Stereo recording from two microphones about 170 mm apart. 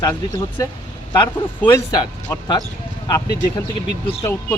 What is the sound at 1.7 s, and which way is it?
Speech, 25° left (ahead or behind).